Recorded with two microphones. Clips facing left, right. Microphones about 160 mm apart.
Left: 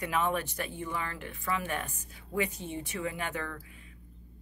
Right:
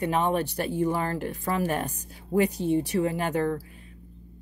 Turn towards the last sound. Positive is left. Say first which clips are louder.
# right 11 dB
turn(degrees=-35)  # may be behind; listen again after turning